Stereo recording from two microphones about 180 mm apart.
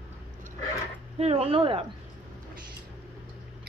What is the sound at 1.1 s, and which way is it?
Speech, 35° right (ahead or behind).